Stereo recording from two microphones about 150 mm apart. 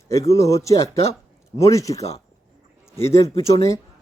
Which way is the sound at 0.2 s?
20° left (ahead or behind).